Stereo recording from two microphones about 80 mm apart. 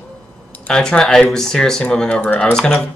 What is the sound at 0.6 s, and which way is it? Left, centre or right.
Speech, centre.